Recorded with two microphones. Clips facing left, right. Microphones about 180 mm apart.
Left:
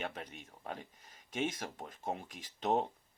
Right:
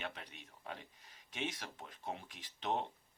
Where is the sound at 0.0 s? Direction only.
45° left (ahead or behind).